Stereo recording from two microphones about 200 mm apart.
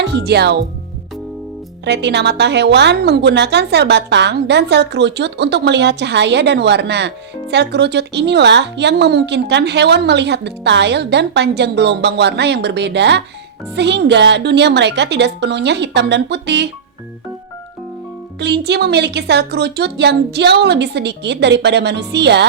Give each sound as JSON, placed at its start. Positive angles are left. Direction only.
{"t": 0.1, "sound": "a woman's voice", "side_deg": -55}
{"t": 1.8, "sound": "a woman's voice", "side_deg": -60}
{"t": 18.3, "sound": "a woman's voice", "side_deg": -55}